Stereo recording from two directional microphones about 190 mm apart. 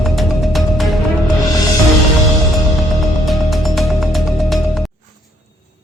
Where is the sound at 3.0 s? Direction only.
Centre (ahead or behind).